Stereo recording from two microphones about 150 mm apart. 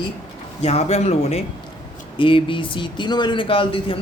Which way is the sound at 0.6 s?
45° left (ahead or behind).